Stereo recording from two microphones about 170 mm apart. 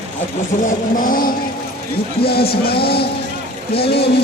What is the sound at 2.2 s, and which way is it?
Speech, 65° left (ahead or behind).